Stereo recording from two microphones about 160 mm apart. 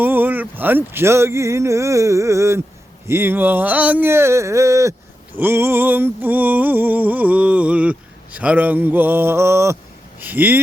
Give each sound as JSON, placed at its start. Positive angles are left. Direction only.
{"t": 0.0, "sound": "speech", "side_deg": -10}
{"t": 3.1, "sound": "a sound", "side_deg": -15}
{"t": 10.2, "sound": "speech", "side_deg": -10}